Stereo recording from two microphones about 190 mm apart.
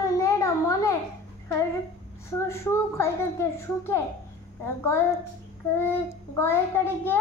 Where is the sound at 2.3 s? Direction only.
15° left (ahead or behind).